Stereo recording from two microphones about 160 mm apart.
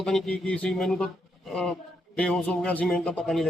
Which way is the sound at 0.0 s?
5° left (ahead or behind).